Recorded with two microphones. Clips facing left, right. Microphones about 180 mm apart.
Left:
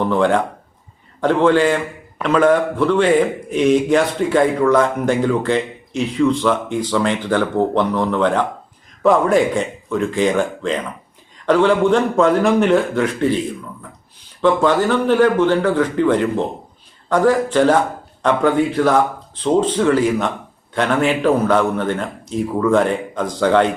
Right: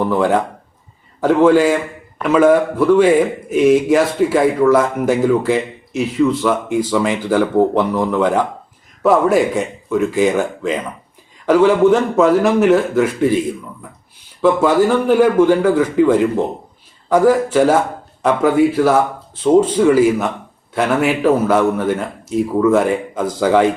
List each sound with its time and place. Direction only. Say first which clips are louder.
0.0 s a man's voice: right 1 dB; 5° right (ahead or behind)